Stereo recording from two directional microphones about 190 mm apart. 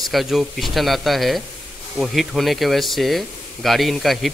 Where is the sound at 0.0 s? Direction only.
Centre (ahead or behind).